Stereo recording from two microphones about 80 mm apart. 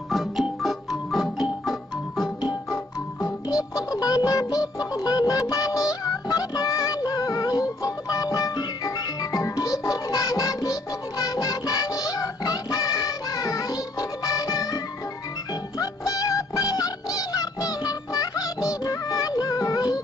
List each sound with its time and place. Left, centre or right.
0.1 s music: centre
3.4 s music: left